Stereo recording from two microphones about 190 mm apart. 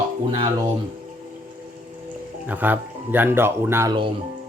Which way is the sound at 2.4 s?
10° right (ahead or behind).